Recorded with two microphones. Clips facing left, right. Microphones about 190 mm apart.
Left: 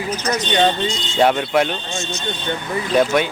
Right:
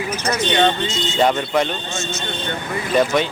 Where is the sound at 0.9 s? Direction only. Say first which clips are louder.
Left 1 dB; 5° left (ahead or behind).